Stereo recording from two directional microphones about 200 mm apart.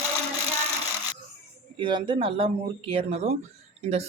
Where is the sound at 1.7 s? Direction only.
25° right (ahead or behind).